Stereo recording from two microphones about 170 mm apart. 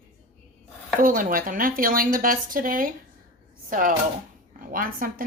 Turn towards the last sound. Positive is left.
turn(degrees=-55)  # may be behind; listen again after turning